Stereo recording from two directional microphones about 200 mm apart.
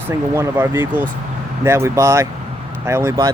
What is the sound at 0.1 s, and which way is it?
Speech, 15° right (ahead or behind).